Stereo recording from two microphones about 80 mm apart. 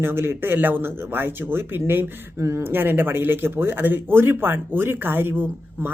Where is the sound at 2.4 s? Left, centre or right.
Right.